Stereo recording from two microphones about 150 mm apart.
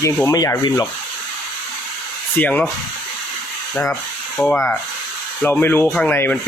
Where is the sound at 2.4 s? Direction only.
10° left (ahead or behind).